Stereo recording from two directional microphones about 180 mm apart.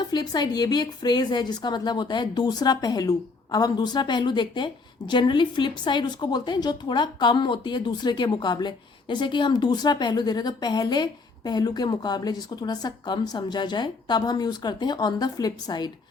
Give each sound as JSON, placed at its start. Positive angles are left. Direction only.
{"t": 0.0, "sound": "a woman's voice", "side_deg": 20}